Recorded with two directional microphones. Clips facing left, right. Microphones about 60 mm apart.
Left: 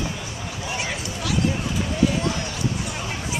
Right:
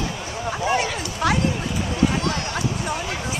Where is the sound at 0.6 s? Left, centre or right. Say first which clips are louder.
Right 6 dB; right.